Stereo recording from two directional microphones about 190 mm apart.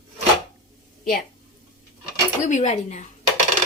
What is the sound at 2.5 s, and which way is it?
Speech, 40° left (ahead or behind).